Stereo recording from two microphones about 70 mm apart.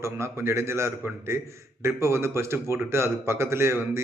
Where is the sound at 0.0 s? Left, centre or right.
Right.